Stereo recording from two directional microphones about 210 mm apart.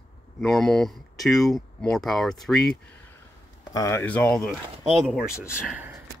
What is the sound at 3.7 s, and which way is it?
Speech, 15° left (ahead or behind).